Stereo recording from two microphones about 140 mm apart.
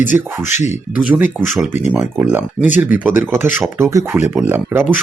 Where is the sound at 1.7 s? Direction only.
15° right (ahead or behind).